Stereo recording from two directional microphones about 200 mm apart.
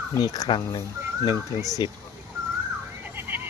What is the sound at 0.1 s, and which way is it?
Speech, 20° left (ahead or behind).